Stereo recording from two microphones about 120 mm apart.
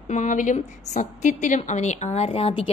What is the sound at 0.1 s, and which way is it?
A woman's voice, 90° left.